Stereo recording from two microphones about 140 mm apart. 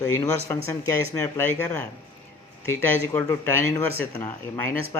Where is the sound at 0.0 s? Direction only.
20° left (ahead or behind).